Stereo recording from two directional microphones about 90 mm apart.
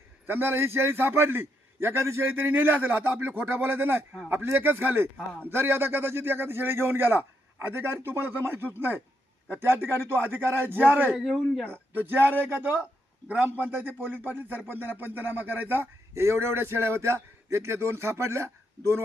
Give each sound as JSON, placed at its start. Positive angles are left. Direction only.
{"t": 0.3, "sound": "speech", "side_deg": -25}
{"t": 11.2, "sound": "speech", "side_deg": 0}
{"t": 11.6, "sound": "speech", "side_deg": -20}
{"t": 13.2, "sound": "speech", "side_deg": -20}